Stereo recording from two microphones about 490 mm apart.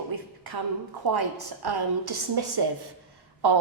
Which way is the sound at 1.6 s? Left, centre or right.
Right.